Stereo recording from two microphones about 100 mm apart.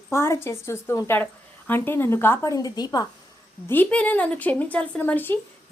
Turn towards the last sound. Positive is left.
turn(degrees=20)  # may be behind; listen again after turning